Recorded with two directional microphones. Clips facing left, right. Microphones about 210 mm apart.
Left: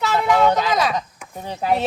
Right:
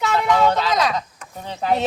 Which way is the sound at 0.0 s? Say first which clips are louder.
Left 1 dB; centre (ahead or behind).